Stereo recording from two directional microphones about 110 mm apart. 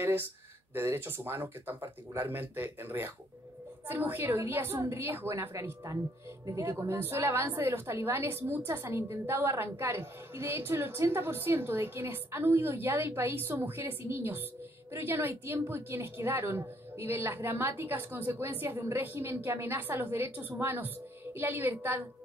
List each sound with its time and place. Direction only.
0.7 s a woman's voice: 20° right (ahead or behind)